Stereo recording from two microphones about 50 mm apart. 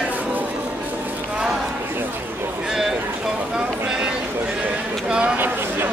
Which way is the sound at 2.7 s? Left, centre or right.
Centre.